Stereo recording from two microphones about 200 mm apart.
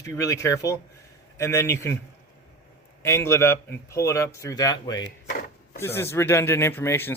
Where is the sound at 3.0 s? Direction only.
15° left (ahead or behind).